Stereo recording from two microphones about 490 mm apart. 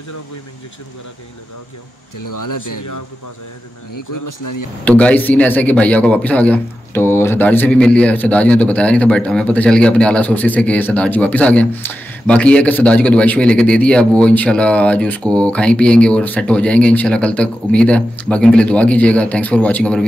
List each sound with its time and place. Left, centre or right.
2.1 s speech: left
4.8 s a man's voice: centre